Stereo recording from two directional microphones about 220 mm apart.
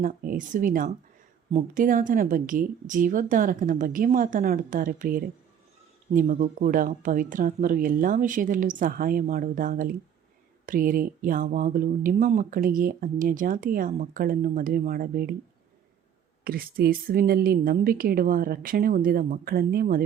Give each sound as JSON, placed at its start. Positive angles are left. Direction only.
{"t": 0.0, "sound": "speech", "side_deg": -40}
{"t": 16.4, "sound": "speech", "side_deg": -45}